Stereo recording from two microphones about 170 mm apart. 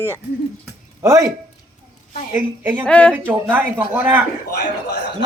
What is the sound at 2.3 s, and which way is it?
Speech, 10° right (ahead or behind).